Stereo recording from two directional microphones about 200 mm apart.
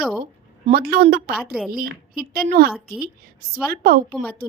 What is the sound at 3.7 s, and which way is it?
Speech, 50° right (ahead or behind).